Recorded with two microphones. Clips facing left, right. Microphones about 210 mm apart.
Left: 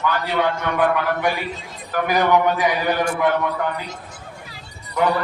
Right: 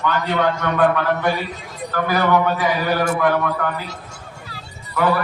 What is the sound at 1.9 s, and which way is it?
Speech, 15° left (ahead or behind).